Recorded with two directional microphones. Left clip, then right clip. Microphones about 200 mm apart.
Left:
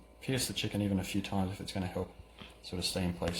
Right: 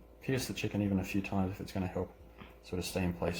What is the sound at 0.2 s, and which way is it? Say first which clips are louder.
Speech: left 1 dB; 15° right (ahead or behind).